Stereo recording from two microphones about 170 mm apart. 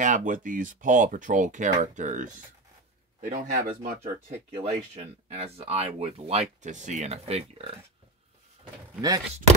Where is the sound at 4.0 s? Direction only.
40° right (ahead or behind).